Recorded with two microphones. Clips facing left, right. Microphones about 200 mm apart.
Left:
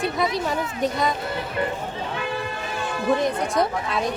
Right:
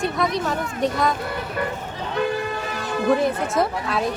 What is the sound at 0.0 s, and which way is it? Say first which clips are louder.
Speech: right 1 dB; centre (ahead or behind).